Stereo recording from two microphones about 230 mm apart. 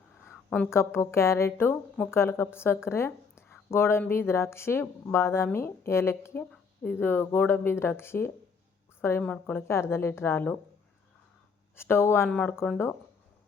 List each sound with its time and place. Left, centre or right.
0.3 s a woman's voice: centre
11.8 s a woman's voice: centre